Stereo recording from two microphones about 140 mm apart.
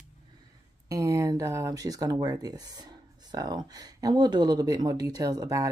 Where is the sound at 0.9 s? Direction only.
20° right (ahead or behind).